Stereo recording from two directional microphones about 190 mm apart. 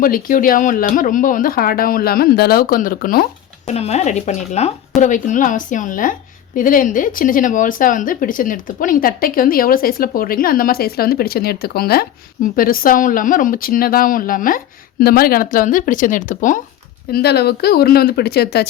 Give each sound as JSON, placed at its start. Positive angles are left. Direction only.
{"t": 0.0, "sound": "speech", "side_deg": 45}
{"t": 3.7, "sound": "speech", "side_deg": 35}
{"t": 17.1, "sound": "speech", "side_deg": 55}